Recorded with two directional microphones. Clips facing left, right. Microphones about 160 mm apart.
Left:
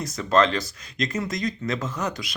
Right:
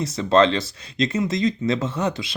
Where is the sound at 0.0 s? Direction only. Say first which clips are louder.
Right 4 dB; 30° right (ahead or behind).